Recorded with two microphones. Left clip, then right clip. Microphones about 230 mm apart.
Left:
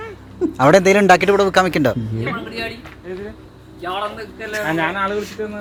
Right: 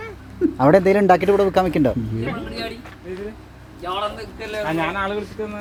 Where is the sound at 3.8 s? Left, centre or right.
Left.